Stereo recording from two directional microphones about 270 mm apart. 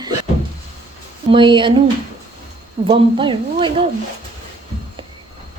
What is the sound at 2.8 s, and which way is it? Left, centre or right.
A woman's voice, centre.